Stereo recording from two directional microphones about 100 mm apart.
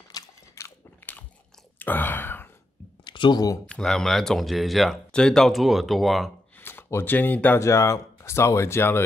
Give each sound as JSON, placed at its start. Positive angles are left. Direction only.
{"t": 0.1, "sound": "biting", "side_deg": 30}
{"t": 1.8, "sound": "a sound", "side_deg": 20}
{"t": 3.1, "sound": "speech", "side_deg": 50}
{"t": 3.6, "sound": "speech", "side_deg": 10}
{"t": 6.6, "sound": "speech", "side_deg": 20}
{"t": 7.6, "sound": "speech", "side_deg": 30}